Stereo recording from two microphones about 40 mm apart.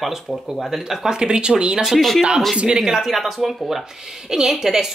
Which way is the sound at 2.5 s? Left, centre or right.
Right.